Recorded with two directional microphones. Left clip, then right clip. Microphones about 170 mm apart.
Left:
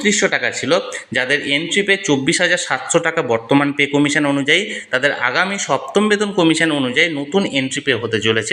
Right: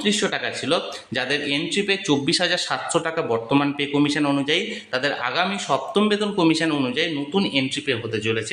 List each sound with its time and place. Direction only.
0.0 s a man's voice: 20° left (ahead or behind)